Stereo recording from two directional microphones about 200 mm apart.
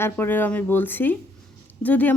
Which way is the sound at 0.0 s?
10° left (ahead or behind).